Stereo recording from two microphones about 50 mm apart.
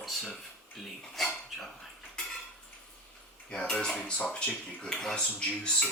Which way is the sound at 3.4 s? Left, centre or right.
Centre.